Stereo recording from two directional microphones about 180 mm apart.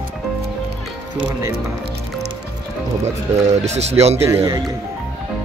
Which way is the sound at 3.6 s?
35° right (ahead or behind).